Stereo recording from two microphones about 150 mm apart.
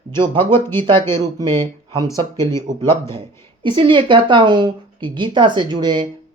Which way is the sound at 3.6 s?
30° right (ahead or behind).